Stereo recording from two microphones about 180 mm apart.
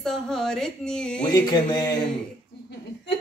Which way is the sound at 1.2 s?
20° left (ahead or behind).